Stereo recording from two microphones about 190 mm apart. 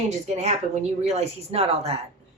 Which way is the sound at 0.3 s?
35° right (ahead or behind).